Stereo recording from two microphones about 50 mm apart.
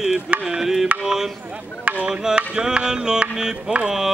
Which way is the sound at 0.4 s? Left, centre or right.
Centre.